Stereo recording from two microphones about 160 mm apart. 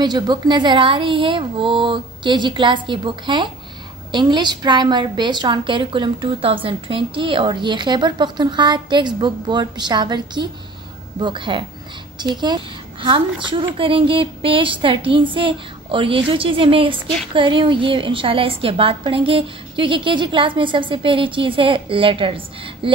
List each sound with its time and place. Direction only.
0.0 s a woman's voice: 30° right (ahead or behind)